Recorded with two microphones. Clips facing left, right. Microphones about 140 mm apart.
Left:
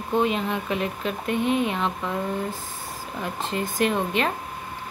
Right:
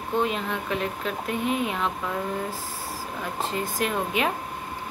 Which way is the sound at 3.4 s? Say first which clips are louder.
Left 3 dB; centre (ahead or behind).